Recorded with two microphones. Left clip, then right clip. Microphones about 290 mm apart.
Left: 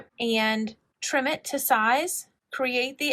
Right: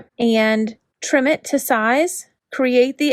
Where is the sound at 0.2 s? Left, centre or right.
Right.